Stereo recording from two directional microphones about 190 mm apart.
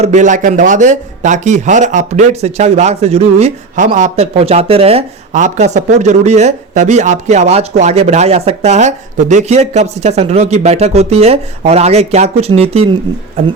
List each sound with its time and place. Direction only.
0.0 s a man's voice: 40° right (ahead or behind)